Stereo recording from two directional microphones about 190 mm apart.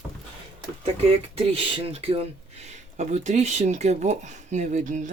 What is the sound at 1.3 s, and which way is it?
Speech, 30° right (ahead or behind).